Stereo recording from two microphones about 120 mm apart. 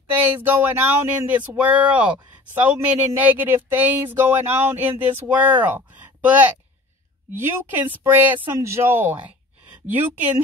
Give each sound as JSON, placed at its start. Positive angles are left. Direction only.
{"t": 0.1, "sound": "speech", "side_deg": -15}